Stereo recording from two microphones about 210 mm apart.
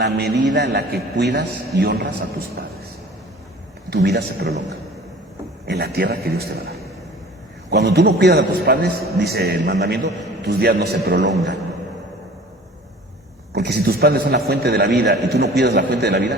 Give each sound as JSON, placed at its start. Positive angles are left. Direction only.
{"t": 0.0, "sound": "a man's voice", "side_deg": -50}
{"t": 3.8, "sound": "a man's voice", "side_deg": -50}
{"t": 5.7, "sound": "a man's voice", "side_deg": -50}
{"t": 13.5, "sound": "a man's voice", "side_deg": -55}